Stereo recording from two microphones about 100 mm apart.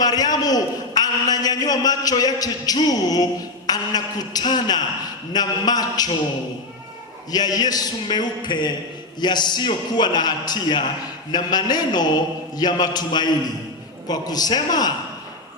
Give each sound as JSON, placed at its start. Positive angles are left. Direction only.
{"t": 0.0, "sound": "a man's voice", "side_deg": 40}
{"t": 7.3, "sound": "a man's voice", "side_deg": 40}